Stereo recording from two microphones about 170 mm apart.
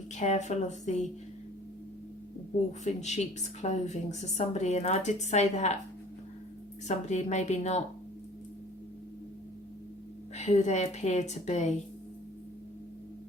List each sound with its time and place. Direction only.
0.2 s a woman's voice: 40° left (ahead or behind)
2.8 s a woman's voice: 40° left (ahead or behind)
6.8 s a woman's voice: 45° left (ahead or behind)
10.3 s a woman's voice: 40° left (ahead or behind)